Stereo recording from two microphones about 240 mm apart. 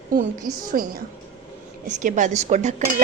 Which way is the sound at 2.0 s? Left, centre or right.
Right.